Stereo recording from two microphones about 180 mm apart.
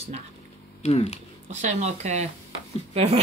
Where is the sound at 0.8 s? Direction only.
35° left (ahead or behind).